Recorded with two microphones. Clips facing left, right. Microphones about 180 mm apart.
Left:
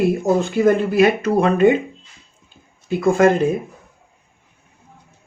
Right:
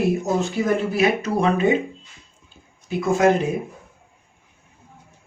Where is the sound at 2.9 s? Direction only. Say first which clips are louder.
Left 4 dB; 55° left (ahead or behind).